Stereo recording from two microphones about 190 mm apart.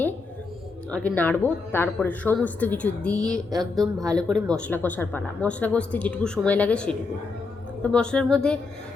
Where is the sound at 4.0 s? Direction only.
20° right (ahead or behind).